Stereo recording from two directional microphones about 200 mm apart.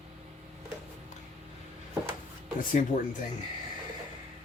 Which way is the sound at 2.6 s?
40° left (ahead or behind).